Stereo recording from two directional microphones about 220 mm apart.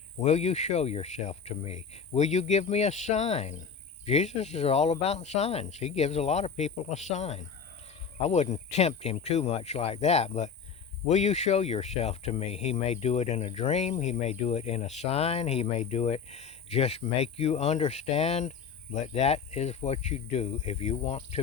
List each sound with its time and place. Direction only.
0.2 s speech: 30° left (ahead or behind)